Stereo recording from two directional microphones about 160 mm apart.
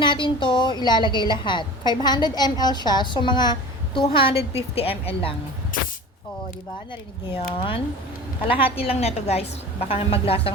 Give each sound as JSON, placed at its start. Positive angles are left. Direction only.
{"t": 0.0, "sound": "a woman's voice", "side_deg": 30}
{"t": 5.7, "sound": "spray", "side_deg": 60}
{"t": 7.3, "sound": "a woman's voice", "side_deg": 35}